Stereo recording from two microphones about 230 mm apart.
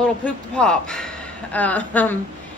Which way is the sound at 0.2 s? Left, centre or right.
Centre.